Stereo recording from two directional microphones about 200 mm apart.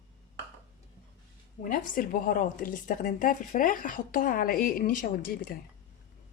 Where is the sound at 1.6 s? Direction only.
40° left (ahead or behind).